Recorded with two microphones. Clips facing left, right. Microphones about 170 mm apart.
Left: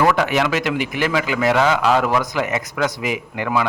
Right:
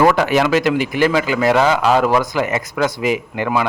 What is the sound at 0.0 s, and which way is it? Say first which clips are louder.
A man's voice: right 3 dB; 35° right (ahead or behind).